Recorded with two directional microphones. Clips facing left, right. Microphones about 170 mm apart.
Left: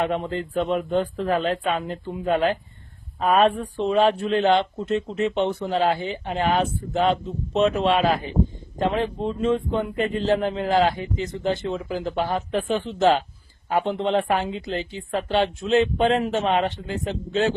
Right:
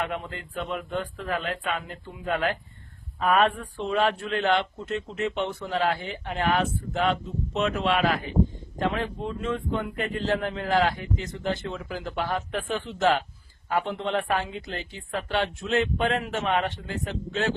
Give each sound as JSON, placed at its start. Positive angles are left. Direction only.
{"t": 0.0, "sound": "speech", "side_deg": 30}